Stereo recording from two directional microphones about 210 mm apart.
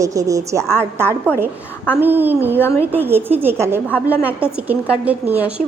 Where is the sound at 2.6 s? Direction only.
10° left (ahead or behind).